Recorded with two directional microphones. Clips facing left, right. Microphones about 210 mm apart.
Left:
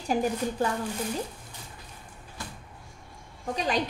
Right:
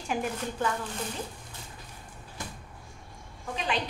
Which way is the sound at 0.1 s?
35° left (ahead or behind).